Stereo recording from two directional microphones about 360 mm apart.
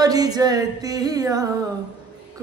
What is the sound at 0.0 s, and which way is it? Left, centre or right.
A man's voice, centre.